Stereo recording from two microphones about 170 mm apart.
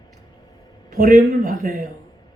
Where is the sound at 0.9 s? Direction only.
55° right (ahead or behind).